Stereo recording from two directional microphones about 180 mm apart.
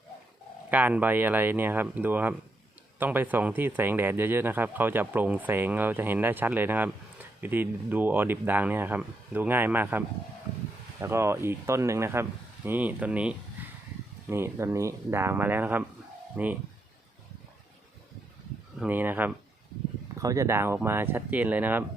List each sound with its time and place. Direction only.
0.7 s speech: 10° right (ahead or behind)
11.0 s speech: 15° right (ahead or behind)
13.6 s a sound: 10° right (ahead or behind)
14.3 s speech: 15° right (ahead or behind)
18.8 s speech: 10° right (ahead or behind)